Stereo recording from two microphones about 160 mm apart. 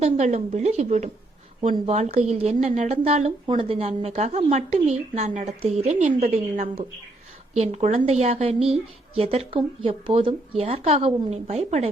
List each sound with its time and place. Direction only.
0.0 s a woman's voice: 45° right (ahead or behind)
3.4 s a woman's voice: 30° right (ahead or behind)